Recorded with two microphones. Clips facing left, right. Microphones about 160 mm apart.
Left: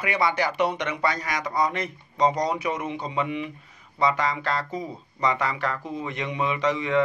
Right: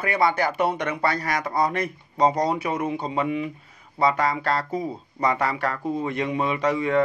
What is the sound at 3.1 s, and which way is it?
A man's voice, 40° right (ahead or behind).